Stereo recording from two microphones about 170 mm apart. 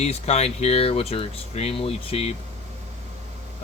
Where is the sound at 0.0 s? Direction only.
40° left (ahead or behind).